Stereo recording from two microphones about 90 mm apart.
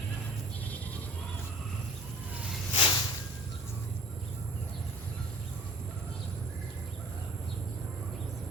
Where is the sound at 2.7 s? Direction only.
60° left (ahead or behind).